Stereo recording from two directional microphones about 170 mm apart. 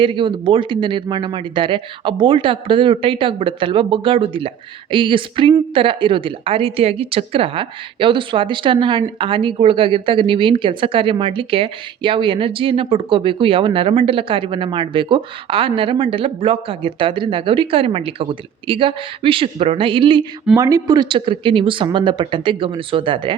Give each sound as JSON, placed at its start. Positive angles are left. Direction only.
{"t": 0.0, "sound": "speech", "side_deg": -30}
{"t": 20.6, "sound": "speech", "side_deg": -20}